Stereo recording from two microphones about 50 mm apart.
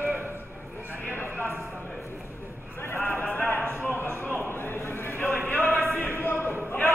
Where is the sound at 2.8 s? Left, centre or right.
Left.